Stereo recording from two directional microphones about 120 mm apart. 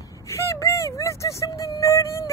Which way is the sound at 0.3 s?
25° left (ahead or behind).